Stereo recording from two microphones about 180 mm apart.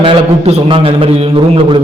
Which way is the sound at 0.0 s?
35° right (ahead or behind).